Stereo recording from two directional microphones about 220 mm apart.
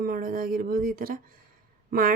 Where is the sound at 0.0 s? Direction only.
40° right (ahead or behind).